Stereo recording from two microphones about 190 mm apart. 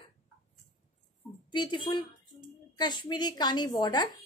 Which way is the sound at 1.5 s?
20° left (ahead or behind).